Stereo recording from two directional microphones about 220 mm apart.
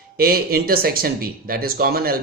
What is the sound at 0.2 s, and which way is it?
A man's voice, 45° right (ahead or behind).